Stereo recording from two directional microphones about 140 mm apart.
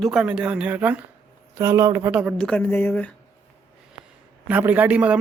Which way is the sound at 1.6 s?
25° right (ahead or behind).